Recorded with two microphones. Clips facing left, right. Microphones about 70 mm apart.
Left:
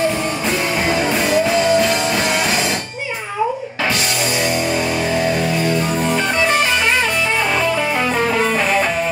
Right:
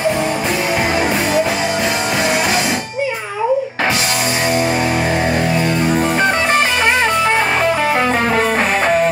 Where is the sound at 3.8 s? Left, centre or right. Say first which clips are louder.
Right 2 dB; right.